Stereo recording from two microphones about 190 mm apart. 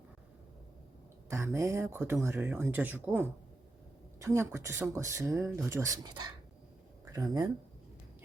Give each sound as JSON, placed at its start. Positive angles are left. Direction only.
{"t": 1.3, "sound": "speech", "side_deg": -15}